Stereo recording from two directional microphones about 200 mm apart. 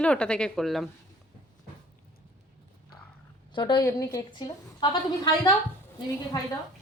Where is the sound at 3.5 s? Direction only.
20° left (ahead or behind).